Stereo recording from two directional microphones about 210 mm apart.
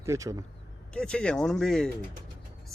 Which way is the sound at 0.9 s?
5° left (ahead or behind).